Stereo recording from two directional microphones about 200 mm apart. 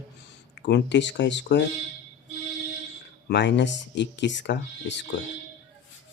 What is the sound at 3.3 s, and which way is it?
Speech, 60° left (ahead or behind).